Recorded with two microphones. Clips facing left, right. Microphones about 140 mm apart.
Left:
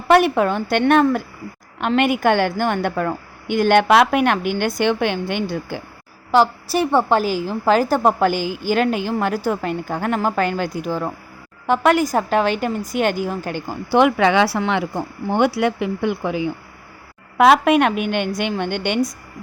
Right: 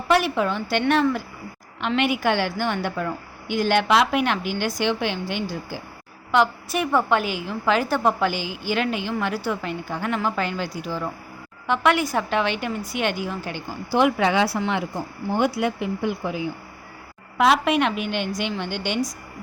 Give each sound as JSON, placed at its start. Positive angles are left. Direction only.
{"t": 0.1, "sound": "a woman's voice", "side_deg": 55}
{"t": 6.3, "sound": "a woman's voice", "side_deg": 35}
{"t": 13.9, "sound": "speech", "side_deg": 75}
{"t": 17.3, "sound": "a woman's voice", "side_deg": 55}